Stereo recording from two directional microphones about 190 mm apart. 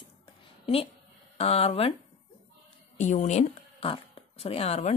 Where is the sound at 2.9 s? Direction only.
40° left (ahead or behind).